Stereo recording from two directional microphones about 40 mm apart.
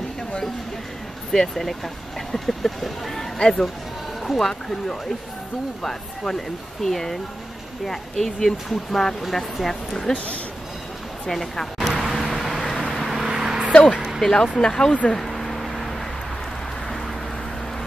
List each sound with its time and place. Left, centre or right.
1.3 s speech: centre
3.3 s speech: centre
10.1 s speech: left
11.2 s speech: centre
11.8 s vehicle: centre
13.2 s vehicle: centre
13.9 s a sound: centre
14.2 s speech: centre
15.1 s a sound: centre